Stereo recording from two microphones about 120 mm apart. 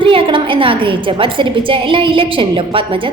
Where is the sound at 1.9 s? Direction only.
45° right (ahead or behind).